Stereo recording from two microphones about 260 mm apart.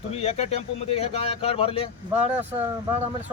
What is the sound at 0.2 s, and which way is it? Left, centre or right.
Speech, left.